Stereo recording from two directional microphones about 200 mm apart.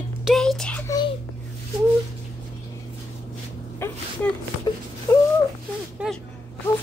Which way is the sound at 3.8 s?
10° left (ahead or behind).